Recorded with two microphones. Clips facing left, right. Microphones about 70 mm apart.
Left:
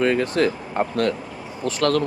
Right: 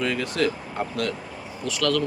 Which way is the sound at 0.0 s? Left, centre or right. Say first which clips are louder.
Left 5 dB; left.